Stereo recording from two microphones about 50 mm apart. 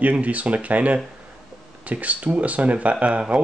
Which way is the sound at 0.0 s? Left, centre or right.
Right.